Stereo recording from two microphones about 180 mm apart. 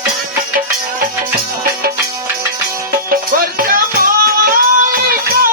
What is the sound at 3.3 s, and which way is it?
Music, 55° right (ahead or behind).